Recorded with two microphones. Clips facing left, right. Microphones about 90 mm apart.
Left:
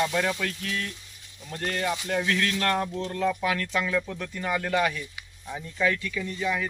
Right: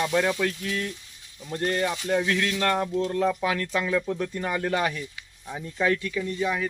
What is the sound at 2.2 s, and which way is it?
Speech, 10° right (ahead or behind).